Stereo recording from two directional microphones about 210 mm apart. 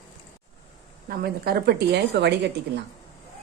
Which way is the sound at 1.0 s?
45° right (ahead or behind).